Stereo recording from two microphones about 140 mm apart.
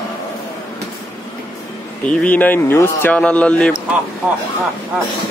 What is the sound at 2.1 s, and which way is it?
Speech, 10° left (ahead or behind).